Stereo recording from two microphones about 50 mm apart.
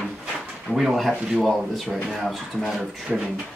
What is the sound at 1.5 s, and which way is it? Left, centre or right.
Speech, centre.